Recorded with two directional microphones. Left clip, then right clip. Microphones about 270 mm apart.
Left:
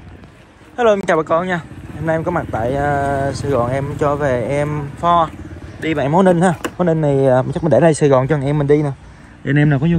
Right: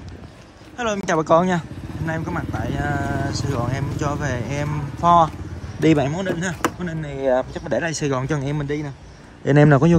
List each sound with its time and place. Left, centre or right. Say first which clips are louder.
0.7 s a woman's voice: left 8 dB; centre
2.0 s speech: left 9 dB; centre
5.8 s a man's voice: right 2 dB; right
6.0 s speech: left 12 dB; centre
7.2 s speech: left 1 dB; right
8.0 s speech: left 10 dB; centre
9.4 s a man's voice: right 2 dB; left